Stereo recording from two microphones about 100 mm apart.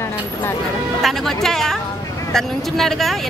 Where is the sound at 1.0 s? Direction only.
Centre (ahead or behind).